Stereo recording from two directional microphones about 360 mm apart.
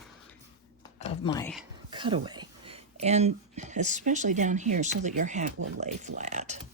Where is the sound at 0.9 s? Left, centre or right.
Centre.